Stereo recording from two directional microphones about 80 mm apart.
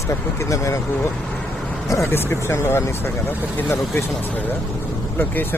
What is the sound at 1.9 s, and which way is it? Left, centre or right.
Speech, left.